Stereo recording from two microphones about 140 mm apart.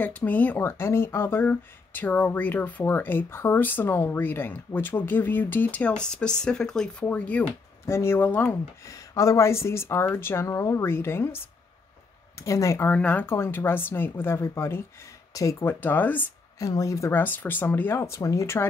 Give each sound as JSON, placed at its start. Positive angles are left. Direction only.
{"t": 0.0, "sound": "speech", "side_deg": 10}
{"t": 8.9, "sound": "a woman's voice", "side_deg": 25}
{"t": 16.6, "sound": "a woman's voice", "side_deg": 25}